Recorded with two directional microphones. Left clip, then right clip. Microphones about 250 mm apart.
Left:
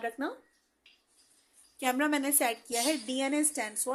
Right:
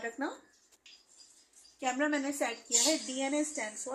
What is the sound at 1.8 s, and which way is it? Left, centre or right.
A woman's voice, left.